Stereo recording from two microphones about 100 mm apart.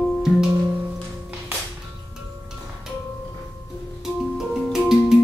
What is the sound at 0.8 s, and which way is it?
Music, 15° right (ahead or behind).